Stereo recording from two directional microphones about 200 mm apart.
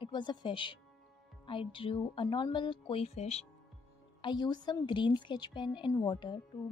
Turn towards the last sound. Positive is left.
turn(degrees=25)  # may be behind; listen again after turning